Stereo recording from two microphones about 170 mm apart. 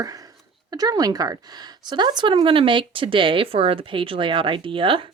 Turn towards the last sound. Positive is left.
turn(degrees=-30)  # may be behind; listen again after turning